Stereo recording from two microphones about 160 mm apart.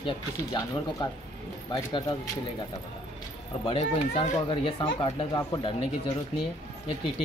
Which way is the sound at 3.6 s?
40° left (ahead or behind).